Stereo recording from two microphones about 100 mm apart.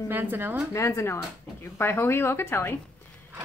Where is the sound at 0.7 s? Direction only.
30° left (ahead or behind).